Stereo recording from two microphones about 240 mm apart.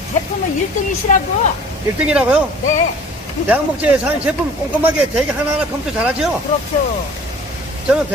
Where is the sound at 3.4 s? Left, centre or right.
Centre.